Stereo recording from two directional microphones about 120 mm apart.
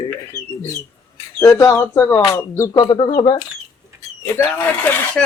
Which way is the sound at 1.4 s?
20° left (ahead or behind).